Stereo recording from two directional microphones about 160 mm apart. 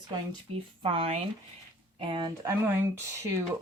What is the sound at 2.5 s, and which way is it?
Speech, 15° right (ahead or behind).